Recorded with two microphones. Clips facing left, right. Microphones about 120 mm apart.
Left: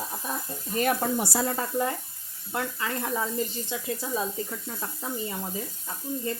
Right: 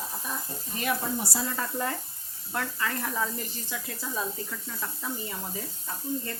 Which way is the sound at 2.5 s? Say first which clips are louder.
Left 1 dB; 25° left (ahead or behind).